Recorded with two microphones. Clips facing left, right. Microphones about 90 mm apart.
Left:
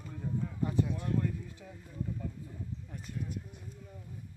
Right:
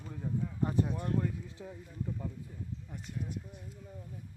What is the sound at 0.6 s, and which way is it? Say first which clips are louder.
Speech: even; 40° right (ahead or behind).